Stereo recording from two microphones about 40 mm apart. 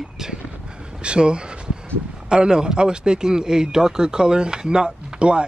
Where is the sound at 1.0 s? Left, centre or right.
Right.